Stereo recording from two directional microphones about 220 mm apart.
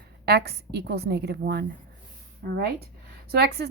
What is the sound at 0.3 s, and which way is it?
A woman's voice, 50° right (ahead or behind).